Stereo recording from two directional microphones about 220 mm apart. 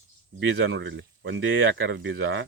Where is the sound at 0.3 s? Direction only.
55° right (ahead or behind).